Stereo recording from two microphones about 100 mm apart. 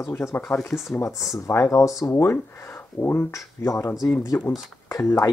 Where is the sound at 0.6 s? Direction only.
Centre (ahead or behind).